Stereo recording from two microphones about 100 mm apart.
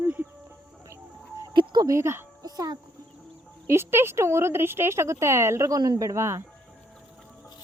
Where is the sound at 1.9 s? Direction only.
25° right (ahead or behind).